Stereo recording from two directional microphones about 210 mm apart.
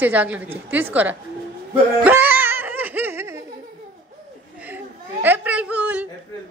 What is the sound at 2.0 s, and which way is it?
Music, 10° right (ahead or behind).